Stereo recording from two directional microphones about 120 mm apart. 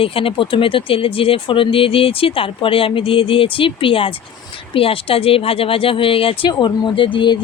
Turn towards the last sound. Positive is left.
turn(degrees=45)  # may be behind; listen again after turning